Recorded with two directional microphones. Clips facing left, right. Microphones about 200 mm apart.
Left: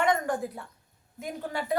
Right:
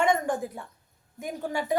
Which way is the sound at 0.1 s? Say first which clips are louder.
Right 1 dB; 15° right (ahead or behind).